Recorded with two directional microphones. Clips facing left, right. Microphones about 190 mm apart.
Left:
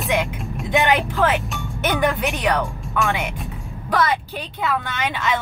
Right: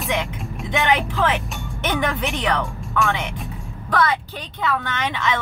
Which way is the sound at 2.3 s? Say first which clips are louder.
Left 2 dB; 15° left (ahead or behind).